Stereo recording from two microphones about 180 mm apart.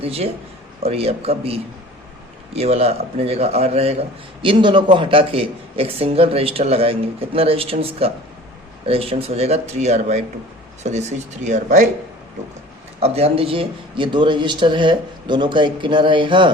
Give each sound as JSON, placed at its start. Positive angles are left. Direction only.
{"t": 0.0, "sound": "a man's voice", "side_deg": -35}
{"t": 11.4, "sound": "speech", "side_deg": -40}
{"t": 13.0, "sound": "a man's voice", "side_deg": -35}